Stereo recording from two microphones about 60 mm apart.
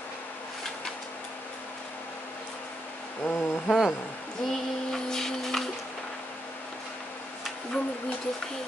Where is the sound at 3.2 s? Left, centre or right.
Left.